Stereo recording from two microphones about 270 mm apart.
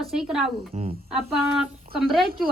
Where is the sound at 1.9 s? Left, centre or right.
Centre.